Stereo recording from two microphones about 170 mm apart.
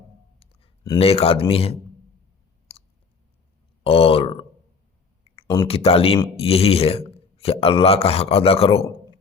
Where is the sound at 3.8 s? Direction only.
35° left (ahead or behind).